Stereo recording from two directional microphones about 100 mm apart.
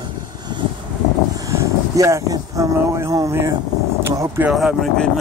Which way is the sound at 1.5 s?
30° right (ahead or behind).